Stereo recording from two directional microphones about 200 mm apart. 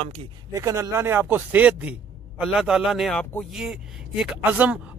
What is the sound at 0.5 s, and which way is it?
A man's voice, 15° right (ahead or behind).